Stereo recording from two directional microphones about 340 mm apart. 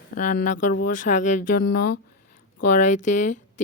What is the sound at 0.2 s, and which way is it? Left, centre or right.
Speech, left.